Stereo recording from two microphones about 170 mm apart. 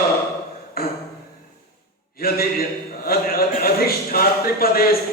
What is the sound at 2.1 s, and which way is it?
A man's voice, 60° left (ahead or behind).